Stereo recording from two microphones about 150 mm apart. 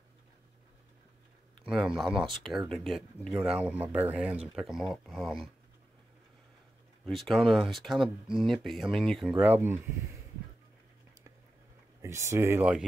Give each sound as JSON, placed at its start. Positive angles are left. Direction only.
{"t": 1.7, "sound": "speech", "side_deg": -5}
{"t": 3.4, "sound": "speech", "side_deg": -10}
{"t": 7.1, "sound": "speech", "side_deg": 0}
{"t": 9.4, "sound": "speech", "side_deg": -15}
{"t": 12.0, "sound": "speech", "side_deg": -20}